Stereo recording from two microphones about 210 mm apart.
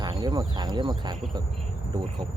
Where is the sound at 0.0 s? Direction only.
20° right (ahead or behind).